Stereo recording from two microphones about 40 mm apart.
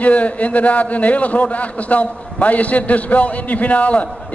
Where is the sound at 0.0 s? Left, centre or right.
Left.